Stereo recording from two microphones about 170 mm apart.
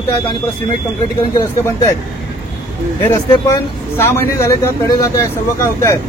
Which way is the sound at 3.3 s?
15° left (ahead or behind).